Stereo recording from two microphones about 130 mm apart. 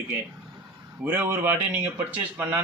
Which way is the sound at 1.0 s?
15° right (ahead or behind).